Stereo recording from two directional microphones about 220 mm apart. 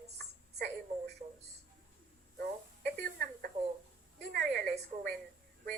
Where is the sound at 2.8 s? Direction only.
45° right (ahead or behind).